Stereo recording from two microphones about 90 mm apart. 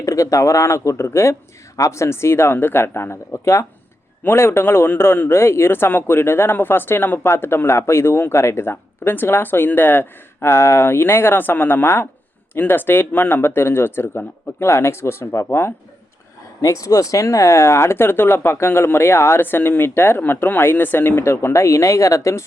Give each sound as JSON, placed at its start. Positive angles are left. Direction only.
{"t": 0.0, "sound": "a man's voice", "side_deg": 35}